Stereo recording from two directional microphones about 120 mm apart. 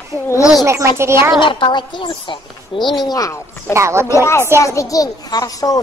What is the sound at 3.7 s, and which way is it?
Speech, 25° right (ahead or behind).